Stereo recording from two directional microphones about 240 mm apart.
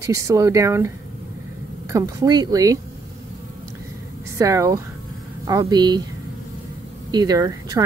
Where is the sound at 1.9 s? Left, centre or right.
Centre.